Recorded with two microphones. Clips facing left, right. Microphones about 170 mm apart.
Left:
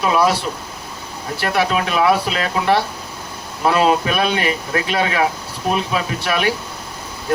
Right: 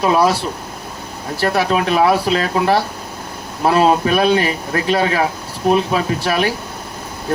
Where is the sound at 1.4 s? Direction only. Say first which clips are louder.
Right 2 dB; 40° right (ahead or behind).